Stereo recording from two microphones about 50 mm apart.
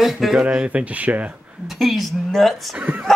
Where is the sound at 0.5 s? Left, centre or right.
Right.